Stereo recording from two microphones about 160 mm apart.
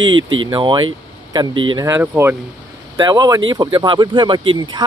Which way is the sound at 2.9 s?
25° right (ahead or behind).